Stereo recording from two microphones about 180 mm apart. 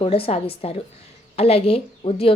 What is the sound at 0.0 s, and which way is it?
A woman's voice, 30° left (ahead or behind).